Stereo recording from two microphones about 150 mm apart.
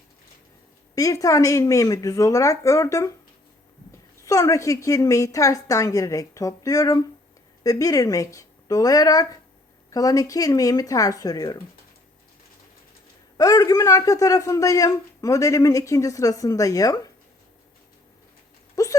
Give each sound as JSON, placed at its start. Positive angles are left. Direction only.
{"t": 0.9, "sound": "a man's voice", "side_deg": 20}
{"t": 4.3, "sound": "a man's voice", "side_deg": 20}
{"t": 13.3, "sound": "a man's voice", "side_deg": 25}
{"t": 18.8, "sound": "a sound", "side_deg": 25}